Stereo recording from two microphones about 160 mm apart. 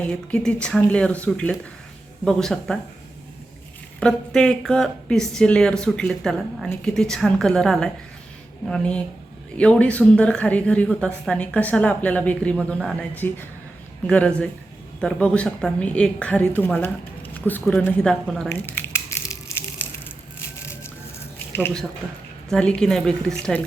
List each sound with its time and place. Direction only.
0.0 s a woman's voice: 5° left (ahead or behind)
4.0 s a woman's voice: 5° left (ahead or behind)
14.1 s a woman's voice: 10° left (ahead or behind)
19.3 s crushing: 15° left (ahead or behind)
21.5 s a woman's voice: 15° left (ahead or behind)